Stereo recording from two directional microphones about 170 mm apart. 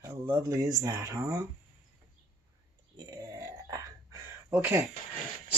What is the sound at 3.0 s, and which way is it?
Burping, 20° right (ahead or behind).